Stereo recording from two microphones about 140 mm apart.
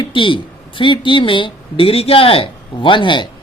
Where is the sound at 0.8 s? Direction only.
35° left (ahead or behind).